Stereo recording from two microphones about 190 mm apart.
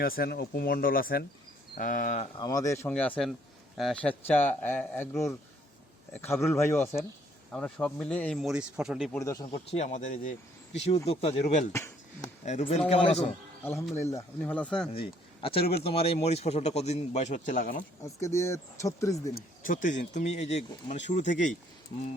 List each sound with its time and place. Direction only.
0.0 s speech: 50° left (ahead or behind)
2.4 s speech: 20° left (ahead or behind); by 9.2 s centre (ahead or behind)
9.2 s speech: 20° left (ahead or behind)
9.7 s a man's voice: 35° left (ahead or behind)
11.7 s a sound: 15° left (ahead or behind)
12.5 s a man's voice: 35° left (ahead or behind)
14.1 s speech: 10° left (ahead or behind)
14.9 s a man's voice: 30° left (ahead or behind); by 17.8 s 45° left (ahead or behind)
18.0 s speech: 15° left (ahead or behind)
19.3 s a man's voice: 50° left (ahead or behind)